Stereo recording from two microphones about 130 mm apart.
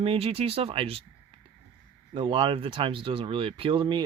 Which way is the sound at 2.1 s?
40° right (ahead or behind).